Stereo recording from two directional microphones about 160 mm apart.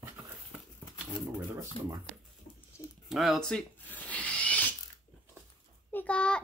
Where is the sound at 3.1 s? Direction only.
Centre (ahead or behind).